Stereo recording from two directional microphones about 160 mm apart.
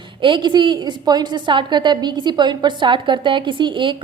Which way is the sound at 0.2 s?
30° right (ahead or behind).